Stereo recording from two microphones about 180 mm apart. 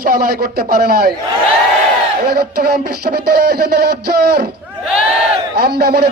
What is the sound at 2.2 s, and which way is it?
A man's voice, 60° right (ahead or behind).